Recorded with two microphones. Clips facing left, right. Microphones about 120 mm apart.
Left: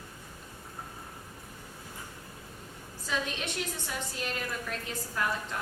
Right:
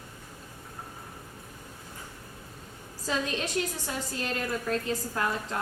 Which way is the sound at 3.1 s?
35° right (ahead or behind).